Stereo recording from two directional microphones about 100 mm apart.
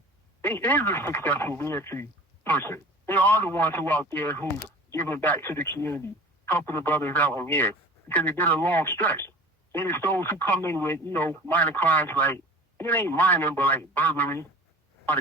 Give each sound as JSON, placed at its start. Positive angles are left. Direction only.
{"t": 0.4, "sound": "speech", "side_deg": 15}